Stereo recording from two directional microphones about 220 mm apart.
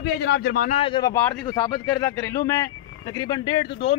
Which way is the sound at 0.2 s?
45° left (ahead or behind).